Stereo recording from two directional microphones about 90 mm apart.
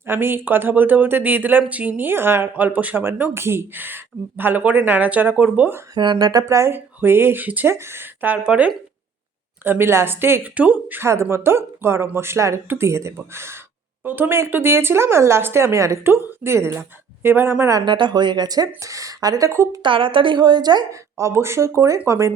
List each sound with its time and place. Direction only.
0.0 s speech: 25° right (ahead or behind)
6.0 s speech: 55° right (ahead or behind); by 8.7 s 15° right (ahead or behind)
9.6 s speech: 25° right (ahead or behind)
11.0 s speech: 30° right (ahead or behind)
17.8 s speech: 60° right (ahead or behind); by 19.5 s 40° right (ahead or behind)
19.5 s speech: 30° right (ahead or behind)
19.8 s a woman's voice: 75° right (ahead or behind); by 20.8 s 50° right (ahead or behind)
21.2 s speech: 30° right (ahead or behind)